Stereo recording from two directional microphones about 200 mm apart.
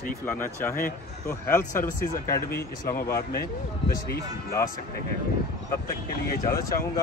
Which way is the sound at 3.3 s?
50° left (ahead or behind).